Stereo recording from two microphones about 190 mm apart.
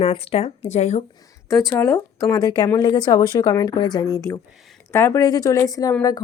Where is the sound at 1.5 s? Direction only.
15° left (ahead or behind).